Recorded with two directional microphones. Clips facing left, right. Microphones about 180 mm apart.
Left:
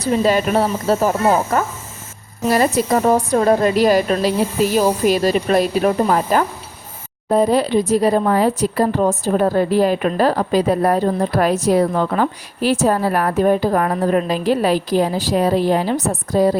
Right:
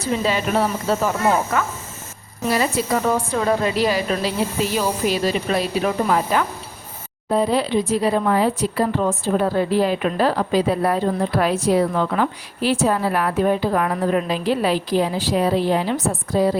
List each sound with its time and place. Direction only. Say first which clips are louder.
0.0 s speech: left 5 dB; 40° left (ahead or behind)